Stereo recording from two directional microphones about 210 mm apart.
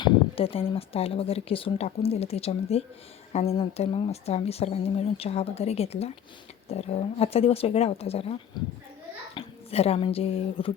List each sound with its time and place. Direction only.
0.0 s speech: 25° left (ahead or behind)